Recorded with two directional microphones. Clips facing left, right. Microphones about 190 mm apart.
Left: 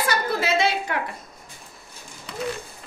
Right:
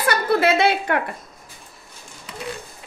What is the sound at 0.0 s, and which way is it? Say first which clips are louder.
A woman's voice: right 6 dB; 60° right (ahead or behind).